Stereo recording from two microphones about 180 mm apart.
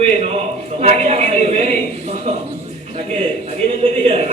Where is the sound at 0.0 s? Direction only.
35° right (ahead or behind).